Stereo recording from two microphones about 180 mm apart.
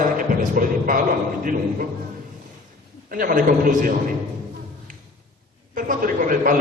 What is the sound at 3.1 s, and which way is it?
Speech, 55° right (ahead or behind).